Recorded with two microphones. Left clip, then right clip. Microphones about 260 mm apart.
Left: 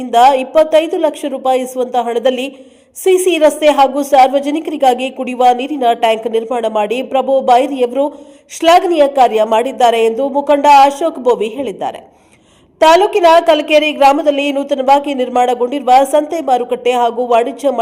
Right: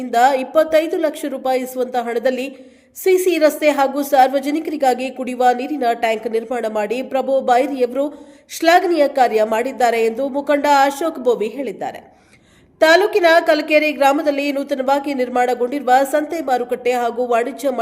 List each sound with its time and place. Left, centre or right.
0.0 s a woman's voice: centre